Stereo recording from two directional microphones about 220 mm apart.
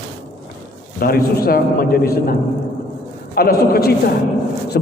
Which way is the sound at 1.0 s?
45° left (ahead or behind).